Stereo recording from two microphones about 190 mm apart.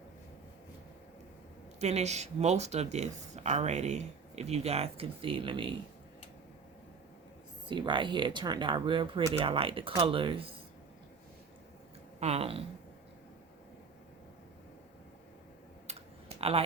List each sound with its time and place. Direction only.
1.8 s speech: 35° right (ahead or behind)
7.7 s speech: 25° right (ahead or behind)
12.2 s speech: 30° right (ahead or behind)
15.9 s computer keyboard: 30° right (ahead or behind)